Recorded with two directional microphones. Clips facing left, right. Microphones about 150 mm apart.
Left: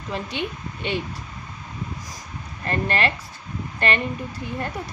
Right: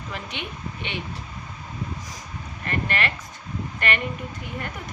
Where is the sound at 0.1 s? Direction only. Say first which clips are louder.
Left 7 dB; 35° left (ahead or behind).